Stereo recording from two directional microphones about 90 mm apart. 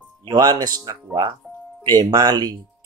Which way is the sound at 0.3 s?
50° right (ahead or behind).